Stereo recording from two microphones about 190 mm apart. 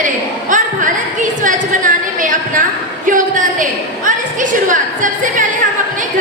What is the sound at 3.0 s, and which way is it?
A woman's voice, 45° right (ahead or behind).